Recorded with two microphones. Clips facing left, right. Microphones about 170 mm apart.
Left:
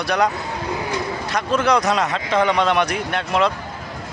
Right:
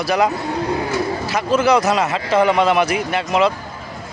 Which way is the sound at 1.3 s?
5° right (ahead or behind).